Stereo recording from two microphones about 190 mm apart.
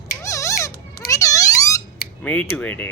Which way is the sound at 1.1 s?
15° left (ahead or behind).